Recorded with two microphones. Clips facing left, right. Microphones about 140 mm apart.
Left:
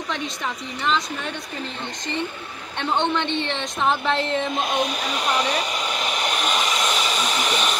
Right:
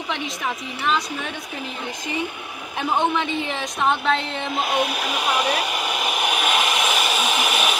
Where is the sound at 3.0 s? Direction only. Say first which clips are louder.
Even; 5° right (ahead or behind).